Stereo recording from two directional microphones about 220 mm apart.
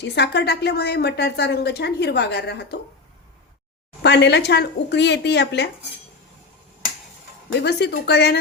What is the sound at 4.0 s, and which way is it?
A woman's voice, 50° left (ahead or behind).